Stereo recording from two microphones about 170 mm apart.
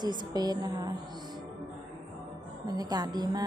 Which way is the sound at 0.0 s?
25° right (ahead or behind).